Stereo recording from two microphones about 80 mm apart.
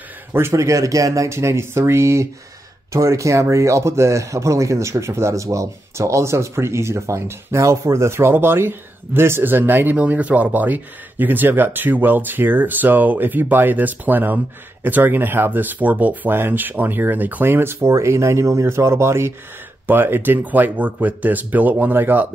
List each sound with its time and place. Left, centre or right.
0.3 s speech: right